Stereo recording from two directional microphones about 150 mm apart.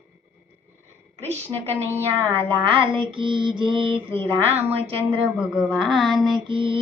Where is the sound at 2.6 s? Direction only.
35° right (ahead or behind).